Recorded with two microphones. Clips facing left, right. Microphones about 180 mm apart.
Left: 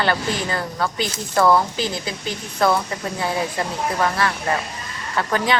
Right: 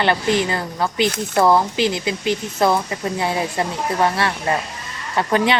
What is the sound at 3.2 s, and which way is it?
A woman's voice, 25° right (ahead or behind).